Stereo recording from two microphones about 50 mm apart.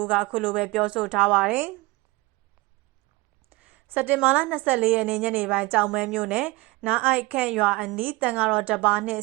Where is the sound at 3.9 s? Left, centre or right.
Right.